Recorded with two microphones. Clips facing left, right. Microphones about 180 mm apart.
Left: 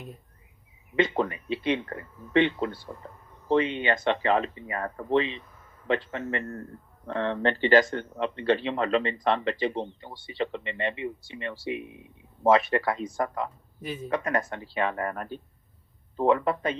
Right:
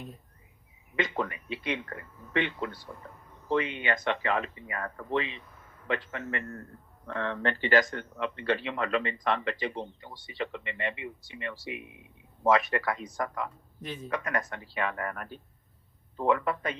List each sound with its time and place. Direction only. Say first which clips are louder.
0.9 s a man's voice: left 6 dB; 30° left (ahead or behind)